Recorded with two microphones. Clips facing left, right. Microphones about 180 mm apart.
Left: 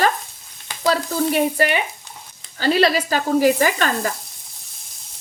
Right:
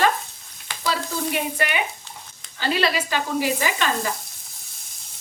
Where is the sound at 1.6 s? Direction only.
35° left (ahead or behind).